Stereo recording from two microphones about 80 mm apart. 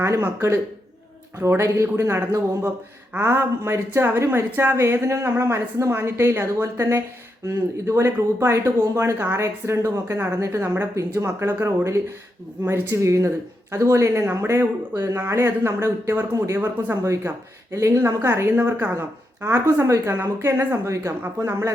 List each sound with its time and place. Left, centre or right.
0.0 s speech: right
10.6 s speech: right